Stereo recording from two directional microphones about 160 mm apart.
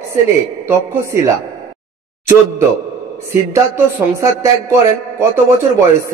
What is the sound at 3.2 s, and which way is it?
A man's voice, 15° right (ahead or behind).